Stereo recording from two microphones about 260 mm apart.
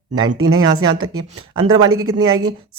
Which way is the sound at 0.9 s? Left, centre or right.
Right.